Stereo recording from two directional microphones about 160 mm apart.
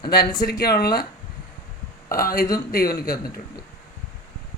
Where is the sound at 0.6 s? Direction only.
75° left (ahead or behind).